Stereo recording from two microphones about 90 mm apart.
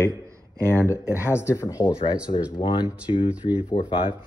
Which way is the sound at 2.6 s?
65° left (ahead or behind).